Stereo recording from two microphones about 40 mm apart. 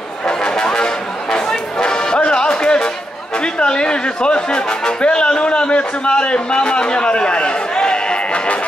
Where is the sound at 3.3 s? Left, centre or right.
Left.